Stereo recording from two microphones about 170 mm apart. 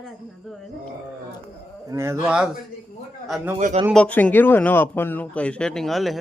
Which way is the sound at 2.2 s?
5° right (ahead or behind).